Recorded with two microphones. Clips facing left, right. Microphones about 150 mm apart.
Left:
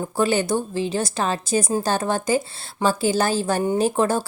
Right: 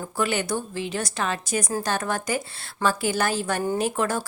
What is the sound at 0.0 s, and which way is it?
A woman's voice, 30° left (ahead or behind).